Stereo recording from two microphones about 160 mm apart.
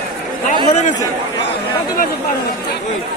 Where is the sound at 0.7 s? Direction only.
50° left (ahead or behind).